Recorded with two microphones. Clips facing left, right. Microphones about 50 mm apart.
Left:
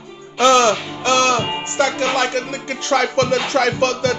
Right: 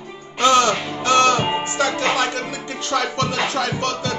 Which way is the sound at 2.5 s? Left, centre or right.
Left.